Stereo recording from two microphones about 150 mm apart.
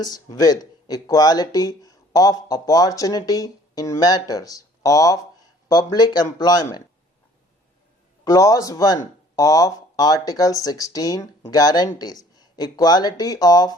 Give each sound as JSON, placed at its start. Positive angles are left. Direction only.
{"t": 0.0, "sound": "speech", "side_deg": 25}
{"t": 8.2, "sound": "speech", "side_deg": 20}